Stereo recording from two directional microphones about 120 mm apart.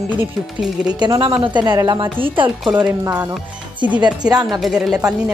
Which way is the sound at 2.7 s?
15° right (ahead or behind).